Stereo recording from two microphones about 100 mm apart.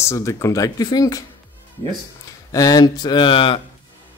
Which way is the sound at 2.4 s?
35° left (ahead or behind).